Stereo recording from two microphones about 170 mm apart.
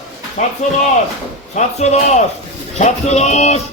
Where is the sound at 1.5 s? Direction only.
40° left (ahead or behind).